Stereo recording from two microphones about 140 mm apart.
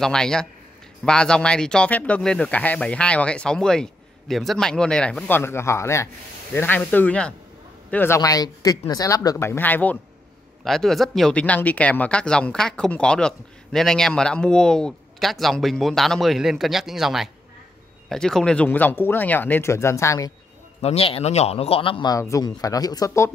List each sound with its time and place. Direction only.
0.0 s speech: 5° left (ahead or behind)
5.3 s speech: 15° left (ahead or behind)
8.2 s speech: 25° left (ahead or behind)
20.8 s speech: 45° left (ahead or behind)
22.1 s speech: 25° left (ahead or behind)